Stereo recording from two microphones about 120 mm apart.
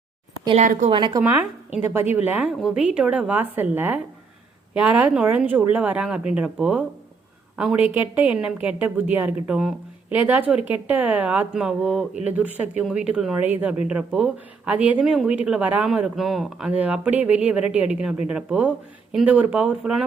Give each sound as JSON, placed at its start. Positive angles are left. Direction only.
{"t": 0.5, "sound": "speech", "side_deg": -90}
{"t": 0.9, "sound": "a woman's voice", "side_deg": -40}
{"t": 2.1, "sound": "a woman's voice", "side_deg": -10}